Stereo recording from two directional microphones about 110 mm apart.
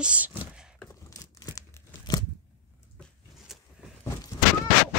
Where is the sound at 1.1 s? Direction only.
30° left (ahead or behind).